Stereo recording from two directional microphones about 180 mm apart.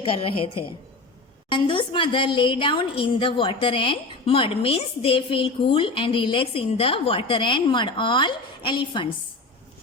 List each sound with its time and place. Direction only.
0.0 s a woman's voice: 30° left (ahead or behind)